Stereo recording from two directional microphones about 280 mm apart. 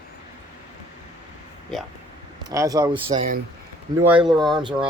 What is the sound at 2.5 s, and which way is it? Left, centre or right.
Speech, centre.